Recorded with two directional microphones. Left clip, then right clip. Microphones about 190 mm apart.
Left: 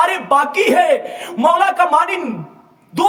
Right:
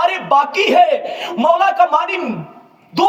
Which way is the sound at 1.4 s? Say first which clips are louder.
Even; 20° left (ahead or behind).